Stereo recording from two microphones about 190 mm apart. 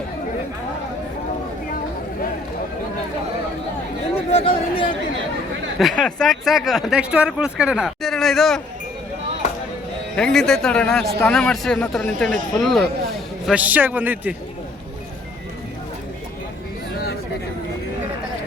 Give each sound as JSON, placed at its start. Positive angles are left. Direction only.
{"t": 4.3, "sound": "a sound", "side_deg": 30}
{"t": 6.0, "sound": "speech", "side_deg": 5}
{"t": 10.2, "sound": "a man's voice", "side_deg": 5}